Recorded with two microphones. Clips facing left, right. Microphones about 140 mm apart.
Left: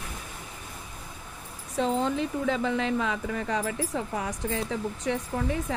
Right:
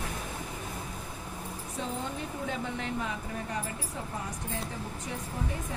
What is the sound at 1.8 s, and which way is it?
Speech, 90° left.